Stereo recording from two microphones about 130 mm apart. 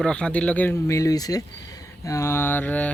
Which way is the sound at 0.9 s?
25° left (ahead or behind).